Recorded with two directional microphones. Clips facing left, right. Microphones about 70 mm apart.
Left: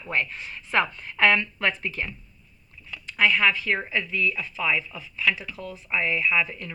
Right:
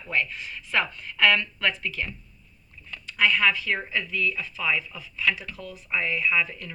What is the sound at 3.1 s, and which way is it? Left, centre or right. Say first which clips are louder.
Speech: left 1 dB; left.